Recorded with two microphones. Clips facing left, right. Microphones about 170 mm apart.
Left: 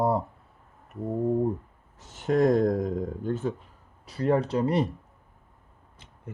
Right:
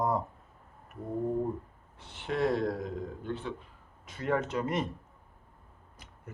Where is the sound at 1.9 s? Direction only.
45° left (ahead or behind).